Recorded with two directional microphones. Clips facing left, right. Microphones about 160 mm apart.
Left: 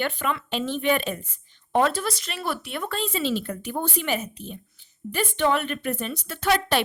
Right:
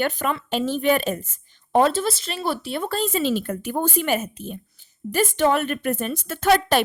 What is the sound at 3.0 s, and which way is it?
A woman's voice, 45° right (ahead or behind).